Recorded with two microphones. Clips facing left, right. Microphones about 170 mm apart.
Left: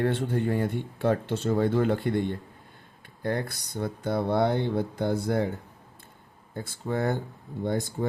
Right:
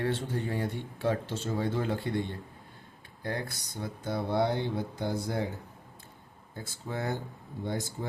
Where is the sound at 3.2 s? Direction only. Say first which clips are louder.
Left 6 dB; 55° left (ahead or behind).